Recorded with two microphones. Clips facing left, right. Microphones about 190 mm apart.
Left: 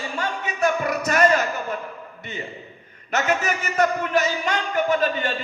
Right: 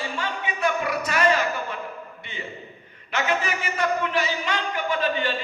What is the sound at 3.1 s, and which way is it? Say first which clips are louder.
A man's voice: left 3 dB; 45° left (ahead or behind).